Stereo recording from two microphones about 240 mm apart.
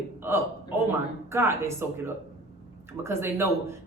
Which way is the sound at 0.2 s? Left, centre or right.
Centre.